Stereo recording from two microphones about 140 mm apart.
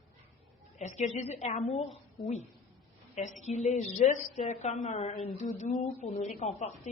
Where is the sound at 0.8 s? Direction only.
55° left (ahead or behind).